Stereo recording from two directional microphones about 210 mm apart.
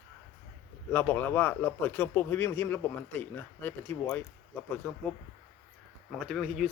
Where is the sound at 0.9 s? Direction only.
10° left (ahead or behind).